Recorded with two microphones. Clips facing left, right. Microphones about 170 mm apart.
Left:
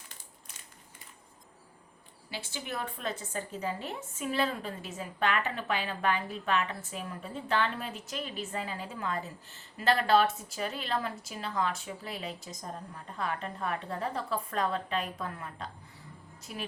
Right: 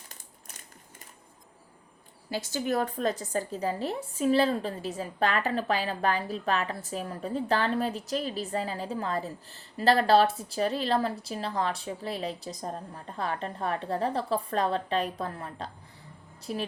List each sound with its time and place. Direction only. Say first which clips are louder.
2.3 s a woman's voice: right 10 dB; 40° right (ahead or behind)